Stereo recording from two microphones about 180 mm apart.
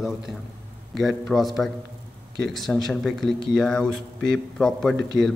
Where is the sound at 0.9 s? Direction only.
Centre (ahead or behind).